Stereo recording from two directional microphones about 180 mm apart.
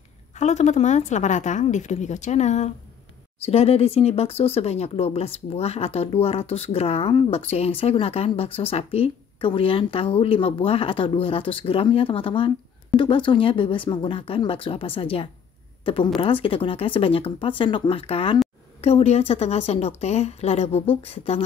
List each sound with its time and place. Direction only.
0.4 s speech: 40° left (ahead or behind)